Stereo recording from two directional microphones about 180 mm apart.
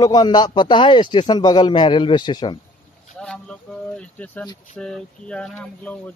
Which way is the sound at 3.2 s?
5° left (ahead or behind).